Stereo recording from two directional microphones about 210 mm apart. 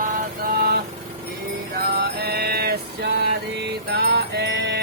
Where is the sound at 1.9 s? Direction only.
50° right (ahead or behind).